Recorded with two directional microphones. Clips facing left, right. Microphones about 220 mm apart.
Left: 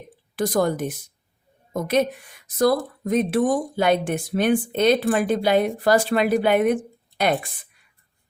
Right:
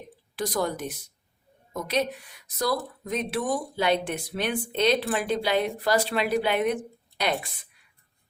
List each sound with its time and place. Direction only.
0.3 s speech: 50° left (ahead or behind)